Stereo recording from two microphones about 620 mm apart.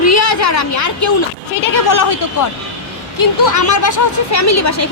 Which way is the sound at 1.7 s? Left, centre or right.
Left.